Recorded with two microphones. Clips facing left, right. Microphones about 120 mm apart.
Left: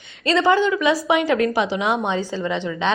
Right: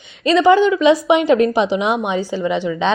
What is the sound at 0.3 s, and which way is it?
A woman's voice, 15° right (ahead or behind).